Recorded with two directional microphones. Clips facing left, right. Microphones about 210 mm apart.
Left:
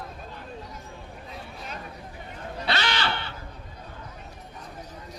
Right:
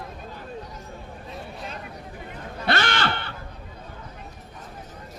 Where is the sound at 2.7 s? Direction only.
50° right (ahead or behind).